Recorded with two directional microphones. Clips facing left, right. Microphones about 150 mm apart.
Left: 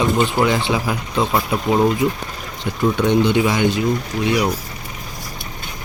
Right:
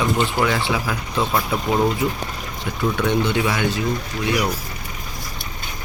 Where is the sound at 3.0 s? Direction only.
15° left (ahead or behind).